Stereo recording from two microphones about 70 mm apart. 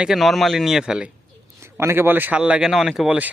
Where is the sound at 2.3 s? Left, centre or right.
Centre.